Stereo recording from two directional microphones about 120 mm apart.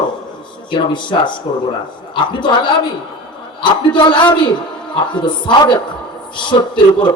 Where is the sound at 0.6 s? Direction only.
40° left (ahead or behind).